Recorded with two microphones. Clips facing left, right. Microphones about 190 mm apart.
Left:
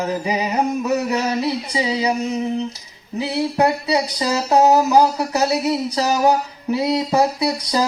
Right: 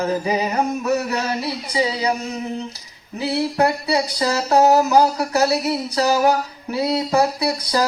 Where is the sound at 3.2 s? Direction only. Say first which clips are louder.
Left 1 dB; 20° left (ahead or behind).